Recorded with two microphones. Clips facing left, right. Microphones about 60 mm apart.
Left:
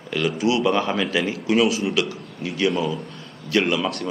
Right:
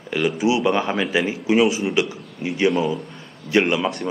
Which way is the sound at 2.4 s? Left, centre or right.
Right.